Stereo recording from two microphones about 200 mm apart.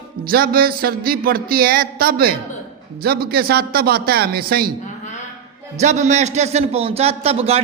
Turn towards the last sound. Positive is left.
turn(degrees=-30)  # may be behind; listen again after turning